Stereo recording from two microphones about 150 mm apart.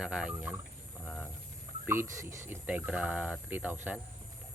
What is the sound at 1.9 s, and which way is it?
Speech, 15° right (ahead or behind).